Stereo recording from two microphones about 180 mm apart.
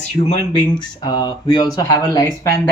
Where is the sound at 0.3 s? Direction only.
25° left (ahead or behind).